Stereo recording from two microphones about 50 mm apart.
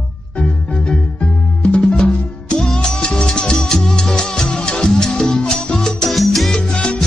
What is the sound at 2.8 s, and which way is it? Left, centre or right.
Music, centre.